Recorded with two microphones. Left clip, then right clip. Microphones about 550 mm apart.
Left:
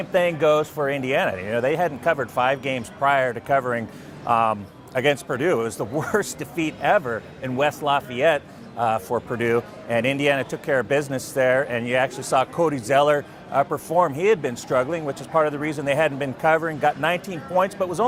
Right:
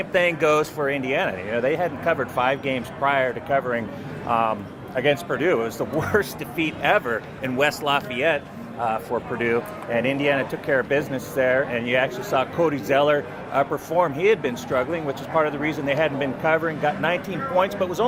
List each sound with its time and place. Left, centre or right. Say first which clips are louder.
0.0 s a man's voice: even; left